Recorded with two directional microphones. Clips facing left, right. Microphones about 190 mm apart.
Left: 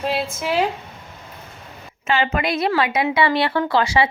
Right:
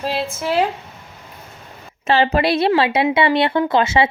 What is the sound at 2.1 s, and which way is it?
Speech, 35° right (ahead or behind).